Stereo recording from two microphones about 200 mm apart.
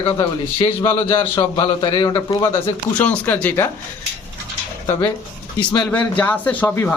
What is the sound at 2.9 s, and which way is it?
Speech, 5° left (ahead or behind).